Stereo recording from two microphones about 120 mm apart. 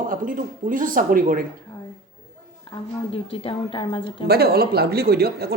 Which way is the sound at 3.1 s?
50° left (ahead or behind).